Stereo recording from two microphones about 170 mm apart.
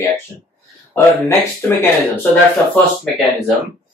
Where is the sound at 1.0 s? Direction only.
15° left (ahead or behind).